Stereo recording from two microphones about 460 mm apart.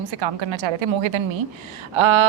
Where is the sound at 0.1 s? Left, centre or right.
Right.